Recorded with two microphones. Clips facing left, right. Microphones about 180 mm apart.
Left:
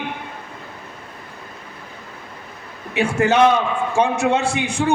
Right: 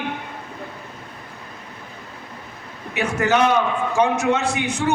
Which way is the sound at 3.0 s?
30° left (ahead or behind).